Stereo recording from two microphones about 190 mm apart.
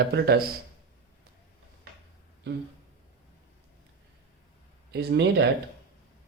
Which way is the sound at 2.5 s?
65° right (ahead or behind).